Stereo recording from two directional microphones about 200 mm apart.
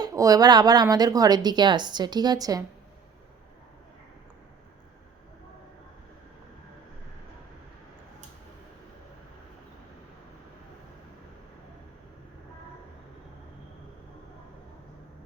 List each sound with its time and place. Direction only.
0.0 s speech: 15° right (ahead or behind)